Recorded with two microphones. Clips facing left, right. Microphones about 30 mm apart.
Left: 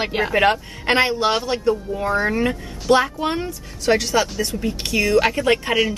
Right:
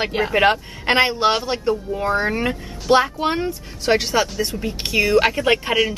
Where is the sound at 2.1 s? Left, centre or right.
Centre.